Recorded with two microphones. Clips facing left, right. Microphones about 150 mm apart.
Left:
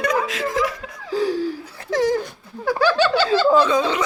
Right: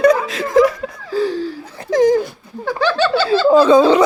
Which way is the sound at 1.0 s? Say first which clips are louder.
Right 2 dB; 15° left (ahead or behind).